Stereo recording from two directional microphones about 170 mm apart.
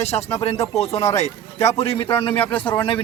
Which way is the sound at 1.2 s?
40° left (ahead or behind).